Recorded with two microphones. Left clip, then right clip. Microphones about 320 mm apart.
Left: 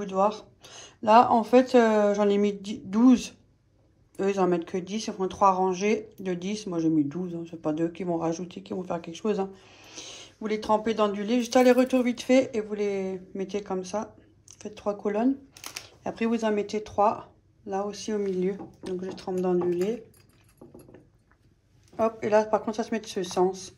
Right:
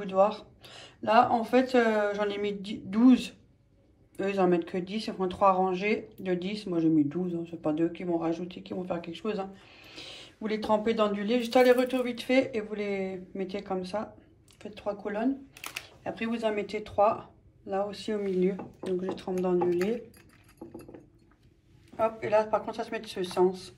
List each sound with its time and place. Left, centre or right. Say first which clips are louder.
0.0 s speech: even; centre
15.1 s speech: left 4 dB; left
16.0 s speech: left 4 dB; centre
21.9 s speech: left 3 dB; centre